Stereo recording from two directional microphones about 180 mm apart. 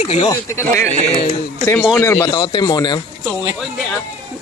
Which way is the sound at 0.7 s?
40° right (ahead or behind).